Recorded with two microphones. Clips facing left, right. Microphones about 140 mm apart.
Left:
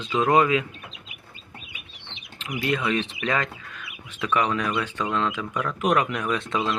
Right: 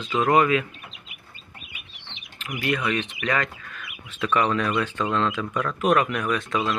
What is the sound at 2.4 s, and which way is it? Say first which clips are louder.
Speech: even; 25° left (ahead or behind).